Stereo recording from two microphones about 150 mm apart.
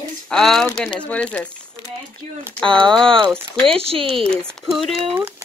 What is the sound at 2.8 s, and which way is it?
Speech, 5° left (ahead or behind).